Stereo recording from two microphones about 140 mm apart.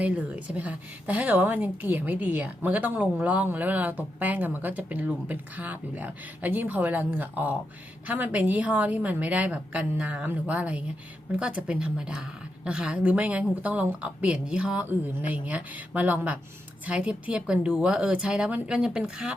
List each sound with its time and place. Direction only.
0.0 s a woman's voice: 10° right (ahead or behind)